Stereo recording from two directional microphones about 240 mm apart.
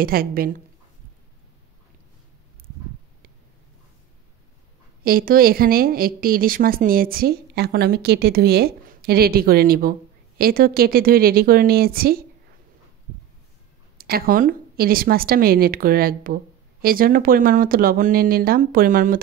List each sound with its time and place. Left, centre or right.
0.0 s a woman's voice: right
5.0 s a woman's voice: right
13.9 s a woman's voice: right